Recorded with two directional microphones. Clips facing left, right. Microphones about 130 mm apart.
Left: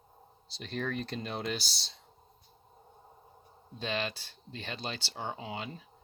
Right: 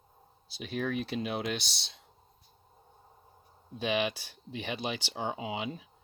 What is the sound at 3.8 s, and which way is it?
Speech, 15° right (ahead or behind).